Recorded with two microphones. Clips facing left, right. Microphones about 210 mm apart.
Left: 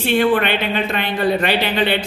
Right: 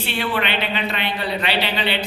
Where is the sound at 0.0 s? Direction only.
50° left (ahead or behind).